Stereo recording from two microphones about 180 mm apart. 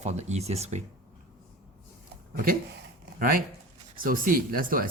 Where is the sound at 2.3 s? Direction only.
55° right (ahead or behind).